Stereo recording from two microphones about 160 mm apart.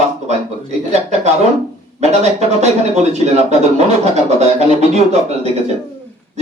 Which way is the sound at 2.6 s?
45° right (ahead or behind).